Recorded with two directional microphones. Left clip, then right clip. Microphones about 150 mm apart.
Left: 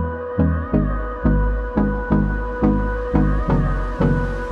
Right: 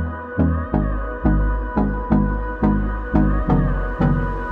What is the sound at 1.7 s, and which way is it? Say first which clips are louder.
Music: even; centre (ahead or behind).